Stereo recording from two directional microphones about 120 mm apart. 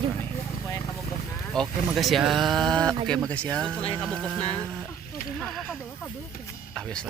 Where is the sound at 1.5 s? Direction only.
5° left (ahead or behind).